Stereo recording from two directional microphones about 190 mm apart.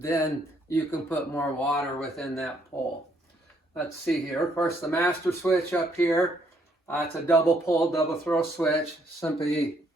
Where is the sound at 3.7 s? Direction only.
5° left (ahead or behind).